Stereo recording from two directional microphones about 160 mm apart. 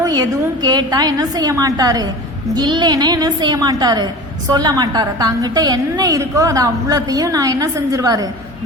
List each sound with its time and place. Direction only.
0.0 s a woman's voice: 25° right (ahead or behind)